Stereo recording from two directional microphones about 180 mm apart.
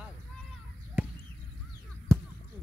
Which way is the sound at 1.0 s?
10° right (ahead or behind).